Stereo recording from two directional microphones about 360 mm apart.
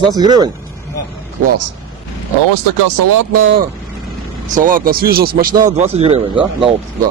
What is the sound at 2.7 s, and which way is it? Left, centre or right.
Speech, right.